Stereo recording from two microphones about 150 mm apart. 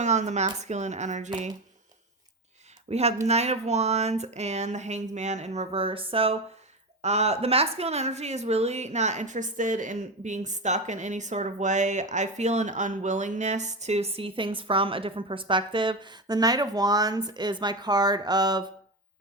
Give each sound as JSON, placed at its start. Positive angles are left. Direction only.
{"t": 0.0, "sound": "speech", "side_deg": -50}
{"t": 2.9, "sound": "speech", "side_deg": -45}